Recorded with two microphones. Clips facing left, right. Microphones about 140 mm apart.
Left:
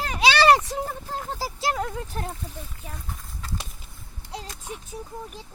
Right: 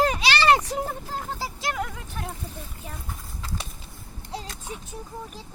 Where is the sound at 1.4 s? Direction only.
30° left (ahead or behind).